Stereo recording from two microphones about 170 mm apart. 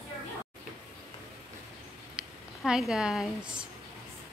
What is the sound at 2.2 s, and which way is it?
Speech, 5° right (ahead or behind).